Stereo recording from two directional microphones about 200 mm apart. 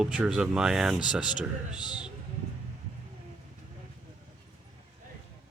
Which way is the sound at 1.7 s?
20° left (ahead or behind).